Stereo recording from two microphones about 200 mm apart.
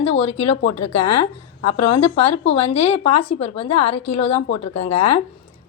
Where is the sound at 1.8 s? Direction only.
30° left (ahead or behind).